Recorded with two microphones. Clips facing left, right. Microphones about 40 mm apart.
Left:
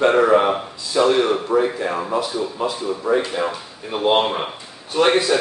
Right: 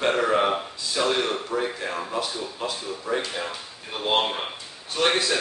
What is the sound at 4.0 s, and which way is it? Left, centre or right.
A man's voice, left.